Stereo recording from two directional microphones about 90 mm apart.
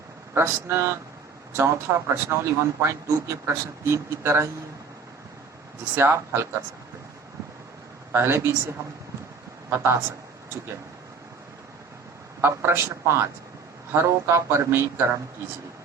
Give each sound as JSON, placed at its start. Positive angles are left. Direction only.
{"t": 0.3, "sound": "speech", "side_deg": -25}
{"t": 6.0, "sound": "speech", "side_deg": -30}
{"t": 8.1, "sound": "speech", "side_deg": -25}
{"t": 9.6, "sound": "a woman's voice", "side_deg": -25}
{"t": 12.4, "sound": "speech", "side_deg": -25}